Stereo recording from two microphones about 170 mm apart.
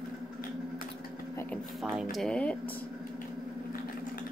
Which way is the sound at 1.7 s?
Centre (ahead or behind).